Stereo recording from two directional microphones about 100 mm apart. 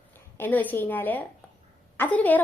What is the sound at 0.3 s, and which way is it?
A woman's voice, 20° left (ahead or behind).